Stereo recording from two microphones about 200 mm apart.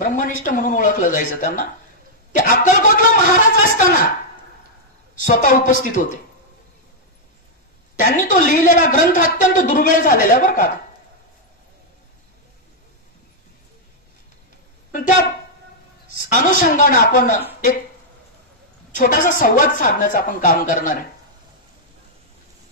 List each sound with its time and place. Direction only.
0.0 s a woman's voice: 40° left (ahead or behind)
5.2 s a woman's voice: 40° left (ahead or behind)
8.0 s a woman's voice: 40° left (ahead or behind)
14.9 s speech: 40° left (ahead or behind)
16.2 s a woman's voice: 40° left (ahead or behind)
18.9 s a woman's voice: 40° left (ahead or behind)